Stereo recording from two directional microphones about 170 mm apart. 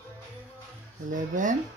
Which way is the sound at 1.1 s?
50° right (ahead or behind).